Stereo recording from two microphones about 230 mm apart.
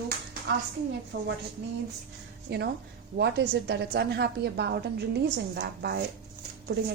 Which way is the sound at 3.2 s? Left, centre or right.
Right.